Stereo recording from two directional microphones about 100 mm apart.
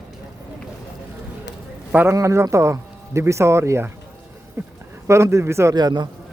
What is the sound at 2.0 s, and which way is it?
Speech, 30° right (ahead or behind).